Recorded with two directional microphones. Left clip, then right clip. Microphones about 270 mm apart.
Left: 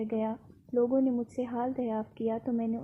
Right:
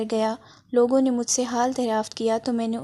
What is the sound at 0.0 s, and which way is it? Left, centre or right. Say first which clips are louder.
Speech: right 9 dB; right.